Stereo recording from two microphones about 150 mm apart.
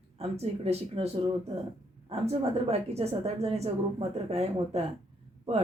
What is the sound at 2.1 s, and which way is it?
A woman's voice, 45° right (ahead or behind).